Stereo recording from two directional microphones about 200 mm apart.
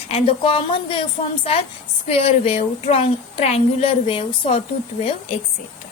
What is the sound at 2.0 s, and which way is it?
A woman's voice, 30° left (ahead or behind).